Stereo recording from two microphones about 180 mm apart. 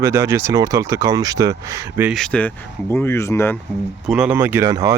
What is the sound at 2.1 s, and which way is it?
Speech, 5° left (ahead or behind).